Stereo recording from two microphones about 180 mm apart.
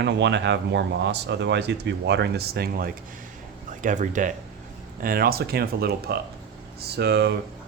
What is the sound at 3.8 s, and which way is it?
Speech, 45° right (ahead or behind).